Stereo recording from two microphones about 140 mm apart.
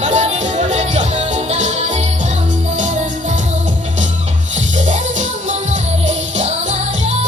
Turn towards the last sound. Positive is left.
turn(degrees=-55)  # may be behind; listen again after turning